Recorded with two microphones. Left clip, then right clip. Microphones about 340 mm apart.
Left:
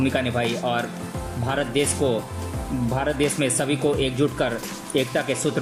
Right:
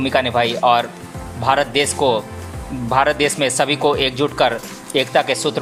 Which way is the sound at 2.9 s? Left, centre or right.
Centre.